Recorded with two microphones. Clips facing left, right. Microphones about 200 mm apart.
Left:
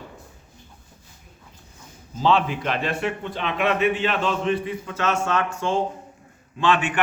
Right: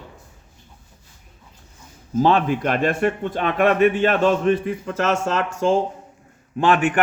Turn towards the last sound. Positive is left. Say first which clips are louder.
# right 4 dB
turn(degrees=-50)  # may be behind; listen again after turning